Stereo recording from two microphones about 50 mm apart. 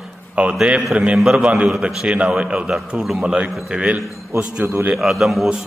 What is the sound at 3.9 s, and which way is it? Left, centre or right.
Speech, centre.